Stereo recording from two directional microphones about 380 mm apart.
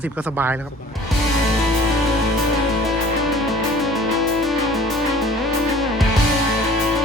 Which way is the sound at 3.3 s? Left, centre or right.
Centre.